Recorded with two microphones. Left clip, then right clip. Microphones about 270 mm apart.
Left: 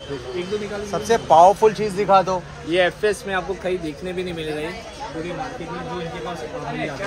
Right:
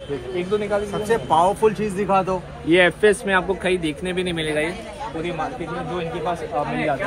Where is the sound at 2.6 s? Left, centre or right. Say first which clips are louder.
Right 4 dB; right.